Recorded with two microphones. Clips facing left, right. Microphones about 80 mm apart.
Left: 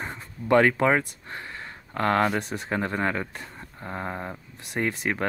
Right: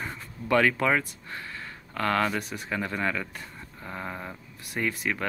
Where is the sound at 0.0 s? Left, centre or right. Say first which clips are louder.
Left 2 dB; left.